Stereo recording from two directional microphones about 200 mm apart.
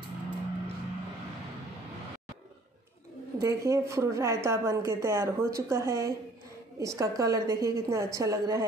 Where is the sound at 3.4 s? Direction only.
15° right (ahead or behind).